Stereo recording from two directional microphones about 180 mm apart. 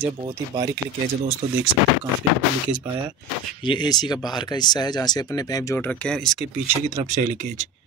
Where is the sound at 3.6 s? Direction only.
25° left (ahead or behind); by 6.4 s 5° left (ahead or behind).